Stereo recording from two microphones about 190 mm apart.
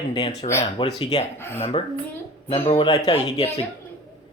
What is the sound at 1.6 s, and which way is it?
Speech, 30° left (ahead or behind).